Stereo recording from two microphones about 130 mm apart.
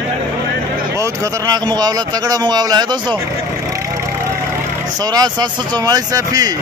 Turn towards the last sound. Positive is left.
turn(degrees=-30)  # may be behind; listen again after turning